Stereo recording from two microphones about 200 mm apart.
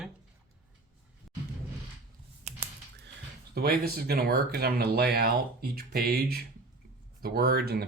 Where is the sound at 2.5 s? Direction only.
30° right (ahead or behind).